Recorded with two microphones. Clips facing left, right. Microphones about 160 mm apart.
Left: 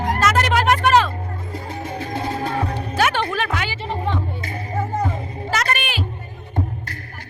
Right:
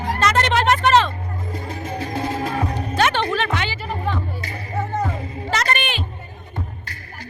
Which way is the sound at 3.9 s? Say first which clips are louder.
Left 1 dB; 25° left (ahead or behind).